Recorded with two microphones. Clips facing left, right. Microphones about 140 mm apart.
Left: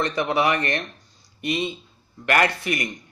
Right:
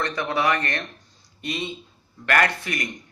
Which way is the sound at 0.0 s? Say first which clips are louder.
Left 2 dB; 15° left (ahead or behind).